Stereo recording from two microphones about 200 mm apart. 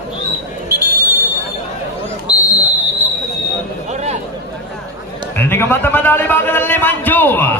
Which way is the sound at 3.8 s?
35° right (ahead or behind).